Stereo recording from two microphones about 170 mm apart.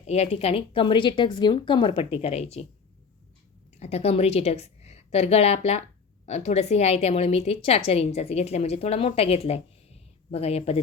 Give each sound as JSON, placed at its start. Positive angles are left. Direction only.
{"t": 0.0, "sound": "a woman's voice", "side_deg": 40}
{"t": 3.8, "sound": "a woman's voice", "side_deg": 40}